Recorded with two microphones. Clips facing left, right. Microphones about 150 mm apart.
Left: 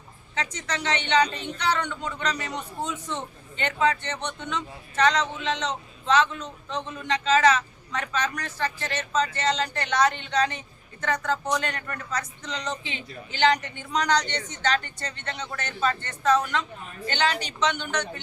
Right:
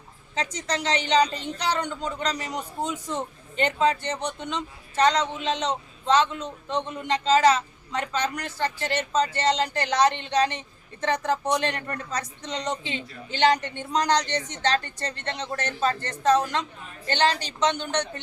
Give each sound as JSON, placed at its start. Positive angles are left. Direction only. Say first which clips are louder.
{"t": 0.3, "sound": "speech", "louder": "right 2 dB", "side_deg": -35}